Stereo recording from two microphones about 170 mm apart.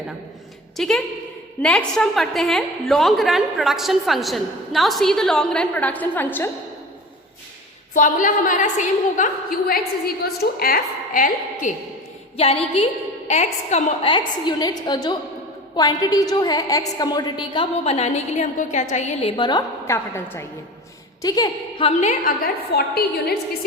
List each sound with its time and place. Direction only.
0.8 s a woman's voice: centre (ahead or behind)
7.9 s a woman's voice: 50° left (ahead or behind)
12.4 s a woman's voice: 35° left (ahead or behind)
19.4 s a woman's voice: 25° left (ahead or behind)
22.7 s a woman's voice: 65° left (ahead or behind)